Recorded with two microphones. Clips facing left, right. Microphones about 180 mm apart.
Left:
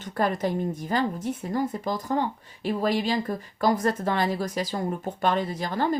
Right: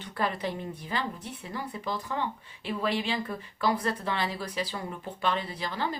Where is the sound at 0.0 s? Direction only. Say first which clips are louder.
Left 5 dB; 45° left (ahead or behind).